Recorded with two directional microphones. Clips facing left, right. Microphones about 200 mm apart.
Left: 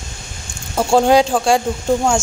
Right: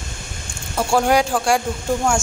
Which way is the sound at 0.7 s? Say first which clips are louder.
Left 4 dB; 25° left (ahead or behind).